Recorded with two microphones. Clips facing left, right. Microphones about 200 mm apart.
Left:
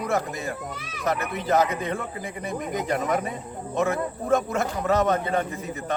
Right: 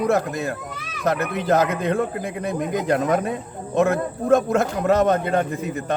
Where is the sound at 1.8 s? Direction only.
90° right.